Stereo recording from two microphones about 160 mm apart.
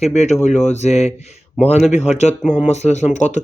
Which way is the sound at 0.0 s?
45° left (ahead or behind).